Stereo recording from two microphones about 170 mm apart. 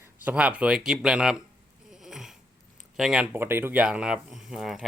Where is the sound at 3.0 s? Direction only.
5° right (ahead or behind).